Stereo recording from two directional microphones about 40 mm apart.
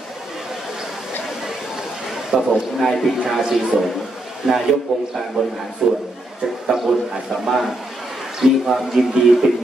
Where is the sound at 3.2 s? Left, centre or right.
Centre.